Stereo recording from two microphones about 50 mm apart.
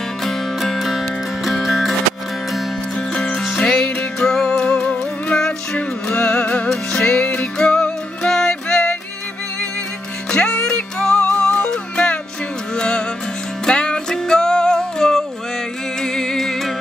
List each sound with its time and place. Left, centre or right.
0.2 s music: centre
3.5 s music: centre
10.3 s music: centre